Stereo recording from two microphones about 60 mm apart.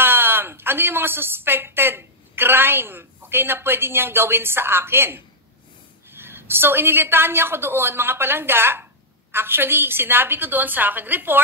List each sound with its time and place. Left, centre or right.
0.0 s a woman's voice: right